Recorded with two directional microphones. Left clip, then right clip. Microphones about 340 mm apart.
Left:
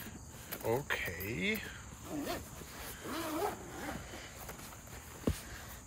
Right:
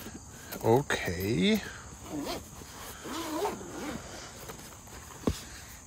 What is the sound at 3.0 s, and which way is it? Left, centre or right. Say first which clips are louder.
Dog: right 4 dB; centre.